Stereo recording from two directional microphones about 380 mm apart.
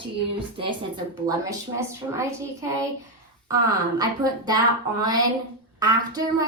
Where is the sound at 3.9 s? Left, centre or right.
Centre.